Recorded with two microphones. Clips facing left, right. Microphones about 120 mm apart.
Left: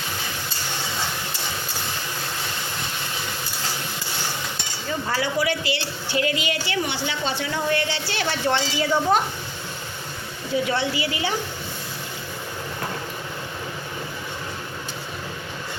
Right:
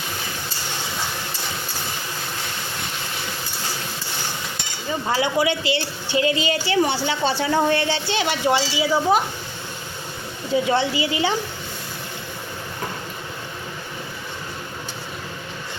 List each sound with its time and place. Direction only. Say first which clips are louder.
5.0 s a woman's voice: right 4 dB; 20° right (ahead or behind); by 9.2 s 5° right (ahead or behind)
10.5 s a woman's voice: right 3 dB; 25° right (ahead or behind)